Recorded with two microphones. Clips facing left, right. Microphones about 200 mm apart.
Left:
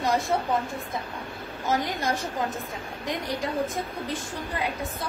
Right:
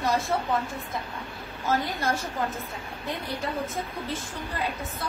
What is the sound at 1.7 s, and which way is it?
A woman's voice, 15° left (ahead or behind).